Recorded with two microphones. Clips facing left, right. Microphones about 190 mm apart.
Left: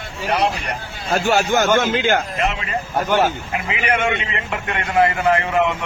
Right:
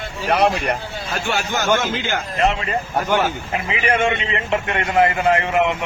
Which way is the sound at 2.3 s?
30° right (ahead or behind).